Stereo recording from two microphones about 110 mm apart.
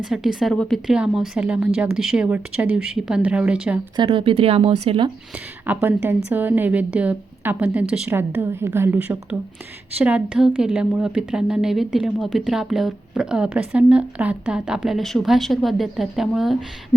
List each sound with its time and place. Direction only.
0.0 s a woman's voice: 5° right (ahead or behind)
3.9 s speech: 50° right (ahead or behind); by 4.9 s 70° right (ahead or behind)
5.6 s a woman's voice: 15° right (ahead or behind)
8.1 s a woman's voice: 20° right (ahead or behind); by 16.6 s centre (ahead or behind)